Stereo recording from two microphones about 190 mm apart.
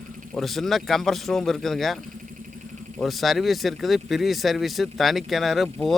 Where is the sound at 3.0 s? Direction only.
Centre (ahead or behind).